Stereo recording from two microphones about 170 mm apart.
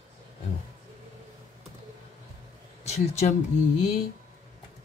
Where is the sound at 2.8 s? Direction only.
40° left (ahead or behind).